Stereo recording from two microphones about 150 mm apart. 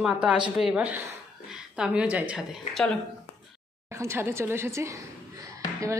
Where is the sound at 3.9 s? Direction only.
15° right (ahead or behind).